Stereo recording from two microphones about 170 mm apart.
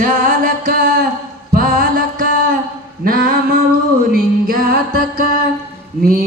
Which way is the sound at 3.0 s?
60° right (ahead or behind).